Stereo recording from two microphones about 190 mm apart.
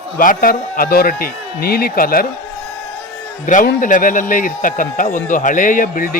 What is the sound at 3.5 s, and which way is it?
A man's voice, 45° left (ahead or behind).